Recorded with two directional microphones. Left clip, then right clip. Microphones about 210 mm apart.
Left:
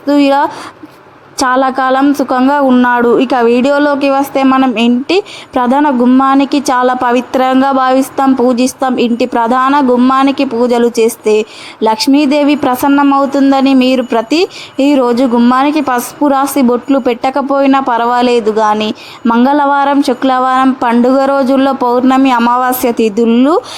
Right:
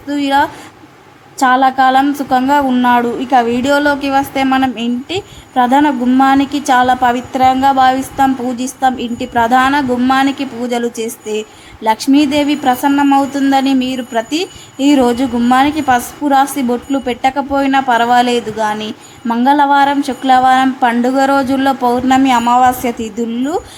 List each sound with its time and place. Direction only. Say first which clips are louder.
0.1 s a woman's voice: left 4 dB; 20° left (ahead or behind)